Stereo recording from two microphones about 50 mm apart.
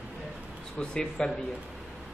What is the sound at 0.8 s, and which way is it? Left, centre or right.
Speech, centre.